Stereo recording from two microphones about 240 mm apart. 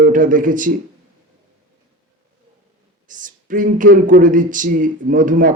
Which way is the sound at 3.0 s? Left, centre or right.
Right.